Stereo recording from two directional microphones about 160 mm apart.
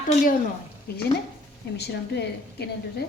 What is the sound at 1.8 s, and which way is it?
Speech, 90° left.